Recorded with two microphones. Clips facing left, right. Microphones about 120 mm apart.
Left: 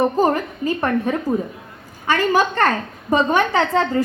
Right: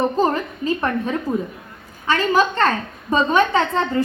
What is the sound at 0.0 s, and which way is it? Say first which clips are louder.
A woman's voice: left 2 dB; 10° left (ahead or behind).